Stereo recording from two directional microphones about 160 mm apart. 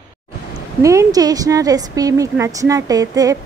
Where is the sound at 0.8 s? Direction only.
20° right (ahead or behind).